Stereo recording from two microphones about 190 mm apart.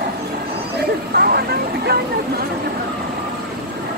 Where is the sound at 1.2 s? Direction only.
55° right (ahead or behind).